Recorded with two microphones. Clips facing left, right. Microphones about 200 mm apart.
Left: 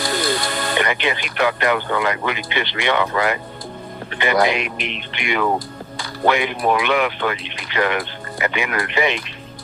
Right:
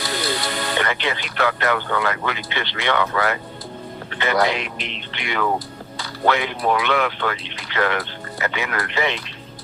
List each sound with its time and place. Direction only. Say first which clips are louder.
0.0 s music: left 3 dB; 45° left (ahead or behind)
0.8 s speech: left 4 dB; 15° left (ahead or behind)